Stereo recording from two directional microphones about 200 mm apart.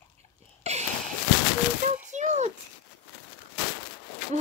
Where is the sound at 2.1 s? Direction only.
35° right (ahead or behind).